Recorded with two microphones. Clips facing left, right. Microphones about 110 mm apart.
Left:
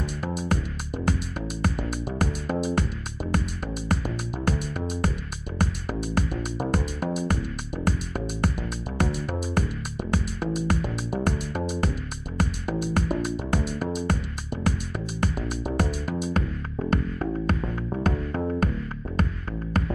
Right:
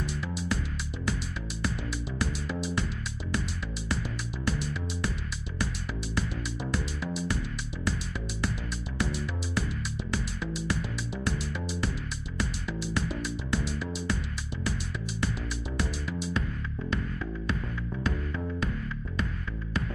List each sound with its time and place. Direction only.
0.0 s music: 50° left (ahead or behind)
4.5 s music: 50° left (ahead or behind)
8.9 s music: 50° left (ahead or behind)
15.7 s music: 50° left (ahead or behind)